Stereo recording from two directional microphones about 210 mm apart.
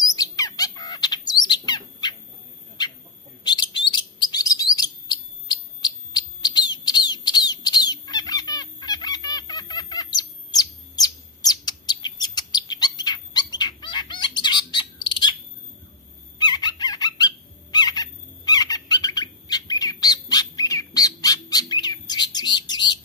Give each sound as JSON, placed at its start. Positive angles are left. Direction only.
{"t": 0.1, "sound": "bird", "side_deg": 15}
{"t": 2.8, "sound": "chicken", "side_deg": 20}
{"t": 3.4, "sound": "chirp", "side_deg": 20}
{"t": 16.3, "sound": "fowl", "side_deg": 20}